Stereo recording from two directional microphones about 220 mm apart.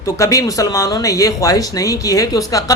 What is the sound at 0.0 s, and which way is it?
A man's voice, 15° left (ahead or behind).